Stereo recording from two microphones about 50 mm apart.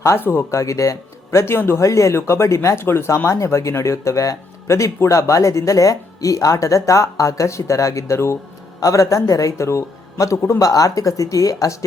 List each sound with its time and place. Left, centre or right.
0.2 s speech: left
0.5 s speech: left
1.5 s speech: left
1.8 s speech: left
3.2 s speech: left
8.9 s speech: left